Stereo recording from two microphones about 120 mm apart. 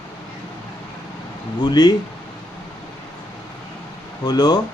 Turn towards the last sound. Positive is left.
turn(degrees=35)  # may be behind; listen again after turning